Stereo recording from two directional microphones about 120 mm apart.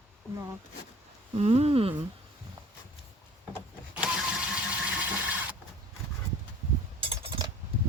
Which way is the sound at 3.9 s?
5° right (ahead or behind).